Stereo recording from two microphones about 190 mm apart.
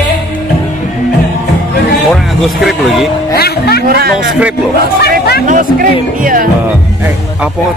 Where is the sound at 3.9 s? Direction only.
55° right (ahead or behind).